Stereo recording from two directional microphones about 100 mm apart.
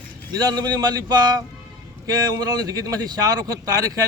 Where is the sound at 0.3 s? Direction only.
40° right (ahead or behind).